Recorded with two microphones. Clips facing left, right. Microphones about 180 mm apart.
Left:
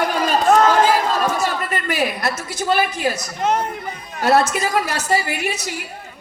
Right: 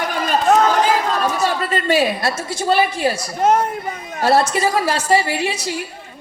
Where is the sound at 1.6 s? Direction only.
30° right (ahead or behind).